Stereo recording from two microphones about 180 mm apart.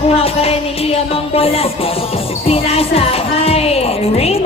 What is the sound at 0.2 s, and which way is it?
Speech, 35° left (ahead or behind).